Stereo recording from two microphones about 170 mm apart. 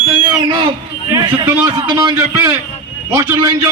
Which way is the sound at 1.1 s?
20° right (ahead or behind).